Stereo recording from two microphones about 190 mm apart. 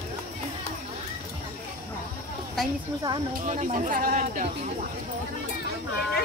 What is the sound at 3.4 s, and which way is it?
Speech, 40° right (ahead or behind).